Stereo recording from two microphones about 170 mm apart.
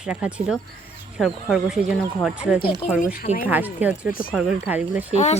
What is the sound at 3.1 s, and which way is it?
Speech, 50° left (ahead or behind).